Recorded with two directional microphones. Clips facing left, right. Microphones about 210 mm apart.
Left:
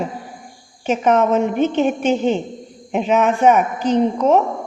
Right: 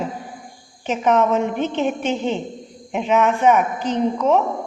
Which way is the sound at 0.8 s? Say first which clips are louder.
Left 2 dB; 45° left (ahead or behind).